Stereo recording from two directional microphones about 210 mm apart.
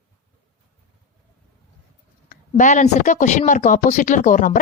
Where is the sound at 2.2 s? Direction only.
35° left (ahead or behind).